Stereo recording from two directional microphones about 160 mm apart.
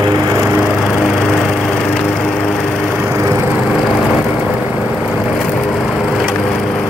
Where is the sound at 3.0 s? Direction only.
15° right (ahead or behind).